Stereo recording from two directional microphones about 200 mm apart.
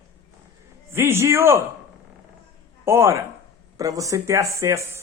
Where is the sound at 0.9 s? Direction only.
10° right (ahead or behind).